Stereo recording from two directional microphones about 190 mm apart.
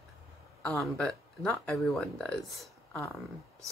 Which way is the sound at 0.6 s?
5° left (ahead or behind).